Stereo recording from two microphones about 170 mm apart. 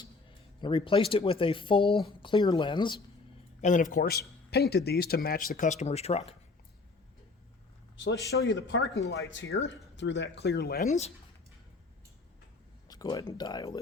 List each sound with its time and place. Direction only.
0.6 s speech: 30° left (ahead or behind)
3.6 s a man's voice: 50° left (ahead or behind)
7.9 s a man's voice: 90° left; by 10.8 s 70° left (ahead or behind)
10.8 s speech: 40° left (ahead or behind)
12.9 s speech: 20° left (ahead or behind)